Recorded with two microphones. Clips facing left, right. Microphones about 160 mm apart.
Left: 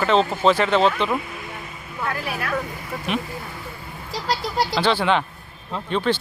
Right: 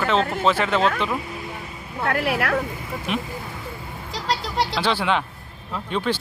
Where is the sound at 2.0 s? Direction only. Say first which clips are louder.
Right 5 dB; 75° right (ahead or behind).